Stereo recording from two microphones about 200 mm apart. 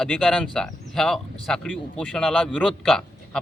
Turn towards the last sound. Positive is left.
turn(degrees=5)  # may be behind; listen again after turning